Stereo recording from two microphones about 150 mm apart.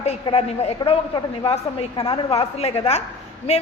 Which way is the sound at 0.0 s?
40° left (ahead or behind).